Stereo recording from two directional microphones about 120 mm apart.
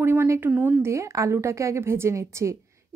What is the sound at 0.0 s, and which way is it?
A woman's voice, 20° right (ahead or behind).